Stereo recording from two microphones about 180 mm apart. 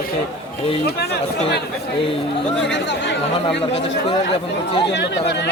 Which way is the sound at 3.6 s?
35° left (ahead or behind).